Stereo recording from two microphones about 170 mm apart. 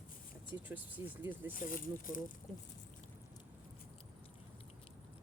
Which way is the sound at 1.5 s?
55° left (ahead or behind).